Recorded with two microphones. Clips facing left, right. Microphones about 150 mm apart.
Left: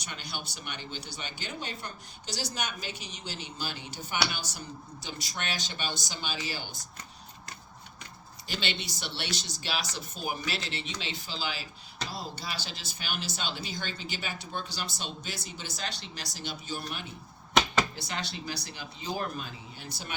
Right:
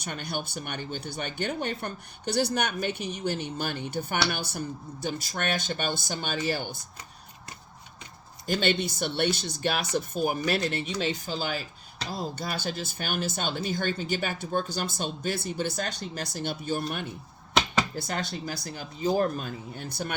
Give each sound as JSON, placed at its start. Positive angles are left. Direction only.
{"t": 0.0, "sound": "speech", "side_deg": -50}
{"t": 8.4, "sound": "speech", "side_deg": -50}